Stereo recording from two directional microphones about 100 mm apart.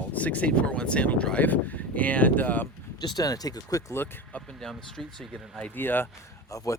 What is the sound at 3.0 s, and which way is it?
Speech, 40° left (ahead or behind).